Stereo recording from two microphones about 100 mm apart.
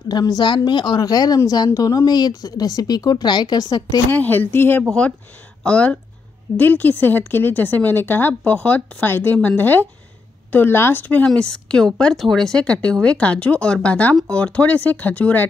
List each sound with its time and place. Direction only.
0.1 s a woman's voice: 45° left (ahead or behind)
4.1 s speech: 20° left (ahead or behind)